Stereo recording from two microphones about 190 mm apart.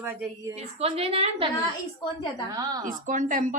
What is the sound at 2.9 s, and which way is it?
Speech, 45° right (ahead or behind).